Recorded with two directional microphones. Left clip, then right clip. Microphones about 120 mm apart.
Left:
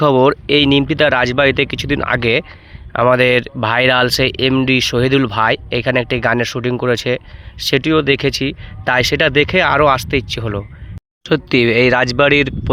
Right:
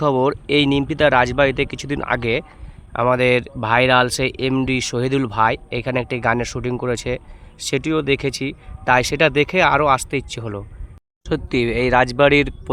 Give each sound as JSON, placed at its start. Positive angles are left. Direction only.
{"t": 0.0, "sound": "speech", "side_deg": 35}